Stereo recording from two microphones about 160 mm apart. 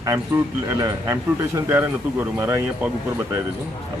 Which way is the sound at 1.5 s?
15° right (ahead or behind).